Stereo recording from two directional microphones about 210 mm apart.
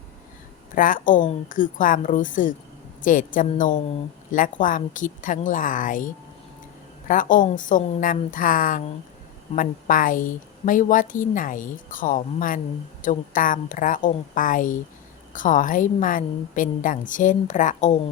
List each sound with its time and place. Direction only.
0.8 s a woman's voice: 40° left (ahead or behind)
7.1 s a woman's voice: 40° left (ahead or behind)